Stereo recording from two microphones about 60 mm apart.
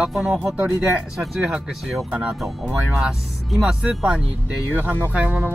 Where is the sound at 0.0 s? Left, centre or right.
Centre.